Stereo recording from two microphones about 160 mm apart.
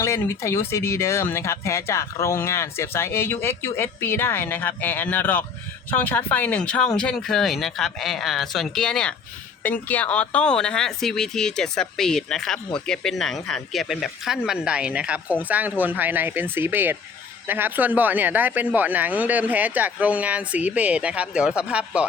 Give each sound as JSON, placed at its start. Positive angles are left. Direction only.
{"t": 0.0, "sound": "speech", "side_deg": 20}